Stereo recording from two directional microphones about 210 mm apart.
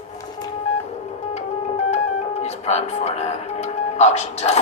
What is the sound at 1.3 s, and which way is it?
Music, 30° left (ahead or behind).